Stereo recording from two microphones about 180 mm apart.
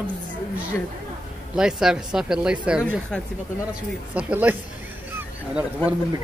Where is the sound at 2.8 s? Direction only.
5° left (ahead or behind).